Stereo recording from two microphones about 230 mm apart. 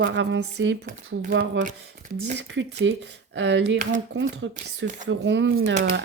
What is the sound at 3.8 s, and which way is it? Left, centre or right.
Speech, right.